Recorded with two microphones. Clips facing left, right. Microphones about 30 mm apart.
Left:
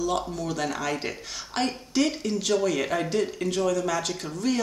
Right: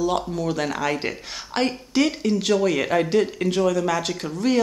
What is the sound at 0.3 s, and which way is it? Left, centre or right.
Speech, right.